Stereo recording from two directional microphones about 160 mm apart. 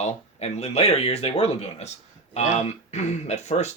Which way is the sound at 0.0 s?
40° left (ahead or behind).